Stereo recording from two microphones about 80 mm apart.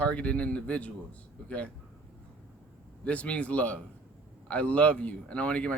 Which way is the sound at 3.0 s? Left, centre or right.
Centre.